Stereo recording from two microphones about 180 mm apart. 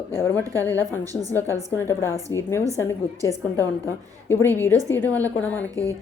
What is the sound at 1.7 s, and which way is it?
A woman's voice, 15° left (ahead or behind).